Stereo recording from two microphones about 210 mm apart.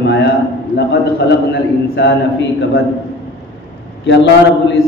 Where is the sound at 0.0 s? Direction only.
55° left (ahead or behind).